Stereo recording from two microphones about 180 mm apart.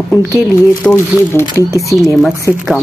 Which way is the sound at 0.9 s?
15° left (ahead or behind).